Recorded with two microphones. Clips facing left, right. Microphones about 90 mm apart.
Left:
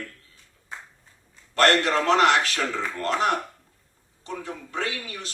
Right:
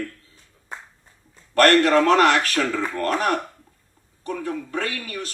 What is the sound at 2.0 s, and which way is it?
Speech, 20° left (ahead or behind).